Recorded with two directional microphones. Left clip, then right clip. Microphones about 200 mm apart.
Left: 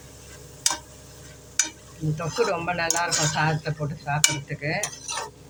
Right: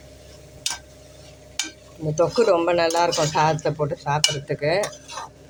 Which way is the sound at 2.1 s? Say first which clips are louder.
Right 7 dB; 40° right (ahead or behind).